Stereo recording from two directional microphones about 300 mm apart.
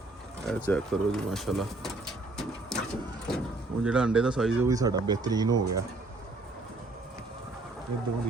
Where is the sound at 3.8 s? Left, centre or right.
Centre.